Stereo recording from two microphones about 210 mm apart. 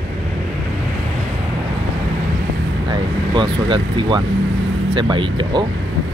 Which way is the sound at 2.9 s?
20° right (ahead or behind).